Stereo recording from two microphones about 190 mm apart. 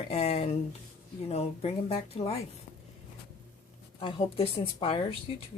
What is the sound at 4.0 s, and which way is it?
Speech, 25° left (ahead or behind).